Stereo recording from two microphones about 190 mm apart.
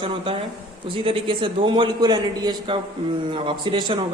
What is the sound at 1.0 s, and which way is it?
A woman's voice, 25° right (ahead or behind).